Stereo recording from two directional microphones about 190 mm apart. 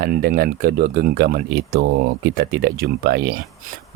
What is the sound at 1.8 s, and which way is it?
Speech, 75° right (ahead or behind).